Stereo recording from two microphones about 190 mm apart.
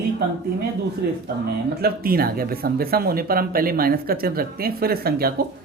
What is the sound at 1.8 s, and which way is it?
Speech, 50° right (ahead or behind).